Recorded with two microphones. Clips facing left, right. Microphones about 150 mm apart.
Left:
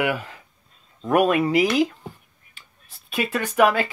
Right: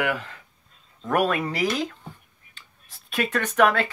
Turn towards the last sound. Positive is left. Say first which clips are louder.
# left 1 dB
turn(degrees=5)  # may be behind; listen again after turning